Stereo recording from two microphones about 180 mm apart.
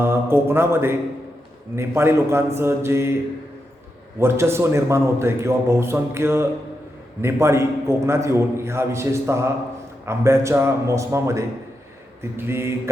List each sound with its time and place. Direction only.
0.0 s a man's voice: 15° right (ahead or behind)
4.2 s a man's voice: 15° right (ahead or behind)